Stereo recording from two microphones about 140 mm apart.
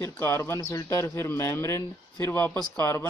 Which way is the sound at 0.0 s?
15° left (ahead or behind).